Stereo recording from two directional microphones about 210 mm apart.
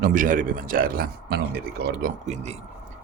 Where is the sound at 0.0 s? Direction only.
40° right (ahead or behind).